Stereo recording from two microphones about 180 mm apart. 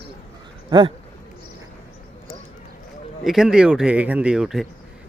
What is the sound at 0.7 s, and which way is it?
Speech, 25° right (ahead or behind).